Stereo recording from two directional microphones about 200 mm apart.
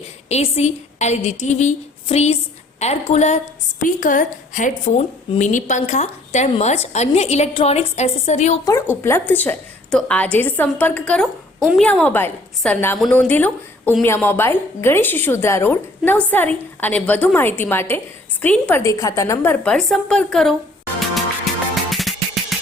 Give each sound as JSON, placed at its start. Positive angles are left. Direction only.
{"t": 0.3, "sound": "a woman's voice", "side_deg": 35}
{"t": 8.6, "sound": "a woman's voice", "side_deg": 15}
{"t": 21.0, "sound": "music", "side_deg": 0}